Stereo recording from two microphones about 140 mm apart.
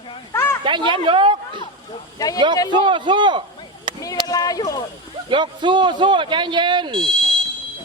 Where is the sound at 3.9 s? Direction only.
35° right (ahead or behind).